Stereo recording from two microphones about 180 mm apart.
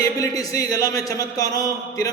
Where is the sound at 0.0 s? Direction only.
20° left (ahead or behind).